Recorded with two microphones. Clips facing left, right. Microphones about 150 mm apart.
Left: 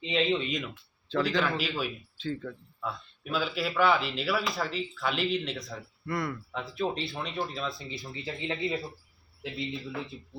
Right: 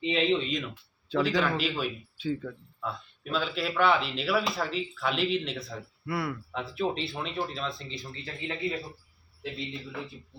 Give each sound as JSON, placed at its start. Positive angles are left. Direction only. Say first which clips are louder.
{"t": 0.0, "sound": "a man's voice", "louder": "right 2 dB", "side_deg": -5}
{"t": 7.9, "sound": "speech", "louder": "left 2 dB", "side_deg": 15}